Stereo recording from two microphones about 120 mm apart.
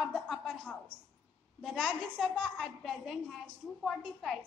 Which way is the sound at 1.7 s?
10° left (ahead or behind).